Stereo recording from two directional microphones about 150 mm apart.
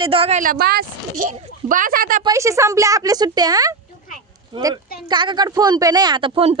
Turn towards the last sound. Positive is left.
turn(degrees=-35)  # may be behind; listen again after turning